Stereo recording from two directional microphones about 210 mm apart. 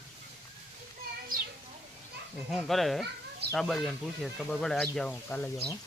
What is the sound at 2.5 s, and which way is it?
Speech, centre (ahead or behind).